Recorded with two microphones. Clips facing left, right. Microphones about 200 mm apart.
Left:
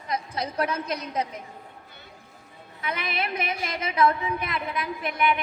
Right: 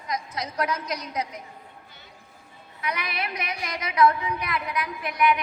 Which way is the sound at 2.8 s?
25° left (ahead or behind).